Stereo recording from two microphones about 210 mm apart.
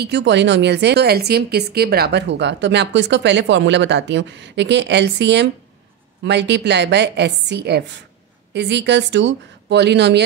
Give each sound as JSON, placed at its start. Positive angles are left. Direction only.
{"t": 0.0, "sound": "a woman's voice", "side_deg": -55}